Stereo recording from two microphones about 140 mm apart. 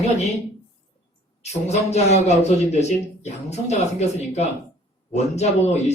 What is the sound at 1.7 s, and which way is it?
Speech, 50° left (ahead or behind).